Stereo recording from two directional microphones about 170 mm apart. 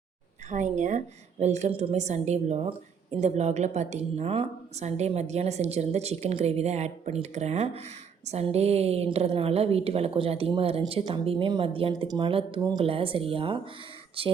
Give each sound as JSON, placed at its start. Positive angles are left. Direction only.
{"t": 0.5, "sound": "a woman's voice", "side_deg": -45}